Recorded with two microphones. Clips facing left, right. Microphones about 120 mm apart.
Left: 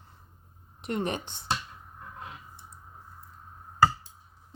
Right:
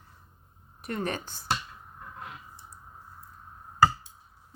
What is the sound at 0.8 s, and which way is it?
Speech, 20° left (ahead or behind).